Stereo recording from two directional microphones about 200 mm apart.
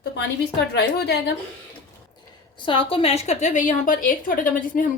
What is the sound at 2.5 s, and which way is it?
A woman's voice, 25° left (ahead or behind).